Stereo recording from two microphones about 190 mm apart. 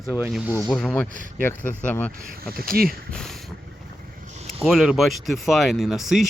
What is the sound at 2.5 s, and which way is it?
Speech, 50° right (ahead or behind).